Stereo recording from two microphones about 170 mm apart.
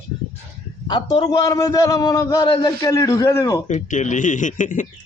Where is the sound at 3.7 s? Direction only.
45° left (ahead or behind).